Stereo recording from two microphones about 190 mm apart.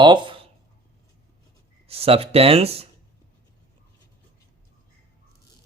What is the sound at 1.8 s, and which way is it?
Speech, 30° right (ahead or behind).